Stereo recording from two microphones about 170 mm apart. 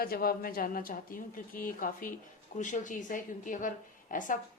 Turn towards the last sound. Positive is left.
turn(degrees=50)  # may be behind; listen again after turning